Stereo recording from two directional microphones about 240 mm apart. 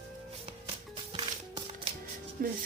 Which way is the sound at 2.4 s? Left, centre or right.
Right.